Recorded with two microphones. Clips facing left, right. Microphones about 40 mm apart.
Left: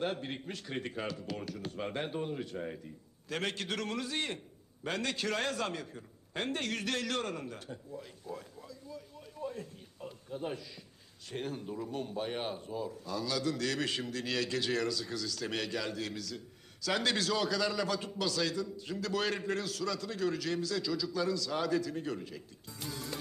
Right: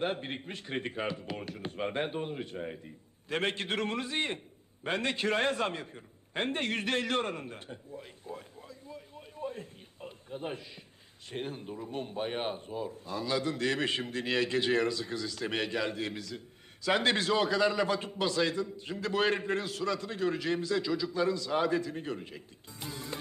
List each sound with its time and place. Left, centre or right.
0.0 s a man's voice: right